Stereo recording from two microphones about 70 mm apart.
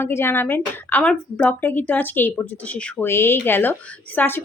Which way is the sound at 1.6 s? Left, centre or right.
Left.